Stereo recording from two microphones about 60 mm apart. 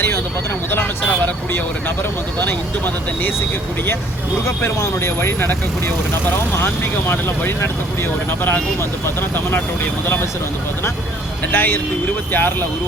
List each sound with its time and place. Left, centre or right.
2.4 s speech: left
4.4 s speech: left
7.1 s speech: left
11.5 s speech: left